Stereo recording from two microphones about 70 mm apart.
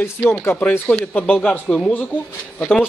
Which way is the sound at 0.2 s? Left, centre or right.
Left.